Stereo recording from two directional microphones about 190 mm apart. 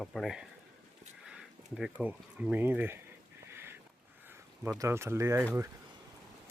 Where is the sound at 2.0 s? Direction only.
10° right (ahead or behind).